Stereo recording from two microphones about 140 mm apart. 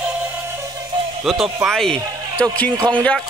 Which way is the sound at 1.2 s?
5° right (ahead or behind).